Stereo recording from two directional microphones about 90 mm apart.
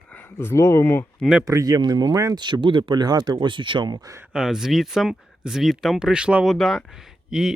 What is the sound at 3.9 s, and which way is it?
Speech, 40° right (ahead or behind).